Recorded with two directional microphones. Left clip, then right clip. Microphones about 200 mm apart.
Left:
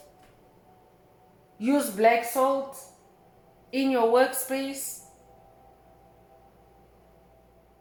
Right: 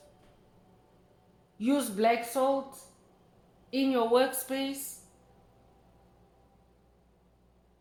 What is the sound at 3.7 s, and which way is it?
A woman's voice, 30° right (ahead or behind).